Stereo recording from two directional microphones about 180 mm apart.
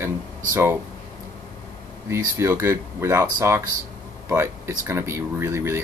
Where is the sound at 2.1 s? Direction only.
15° right (ahead or behind).